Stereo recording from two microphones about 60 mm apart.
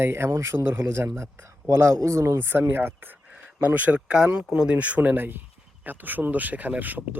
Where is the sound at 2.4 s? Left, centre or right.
Right.